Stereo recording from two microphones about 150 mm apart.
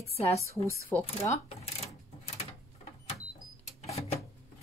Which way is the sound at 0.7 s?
10° left (ahead or behind).